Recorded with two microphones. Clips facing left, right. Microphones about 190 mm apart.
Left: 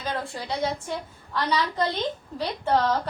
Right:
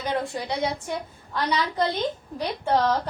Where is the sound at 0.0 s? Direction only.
15° right (ahead or behind).